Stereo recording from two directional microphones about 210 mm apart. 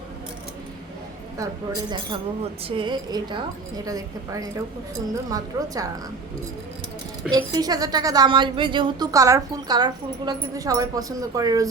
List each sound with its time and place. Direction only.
1.9 s a woman's voice: 25° right (ahead or behind)
7.3 s a woman's voice: 20° right (ahead or behind)